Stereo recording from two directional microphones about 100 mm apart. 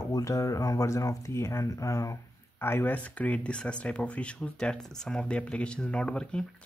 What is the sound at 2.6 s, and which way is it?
Speech, 20° left (ahead or behind).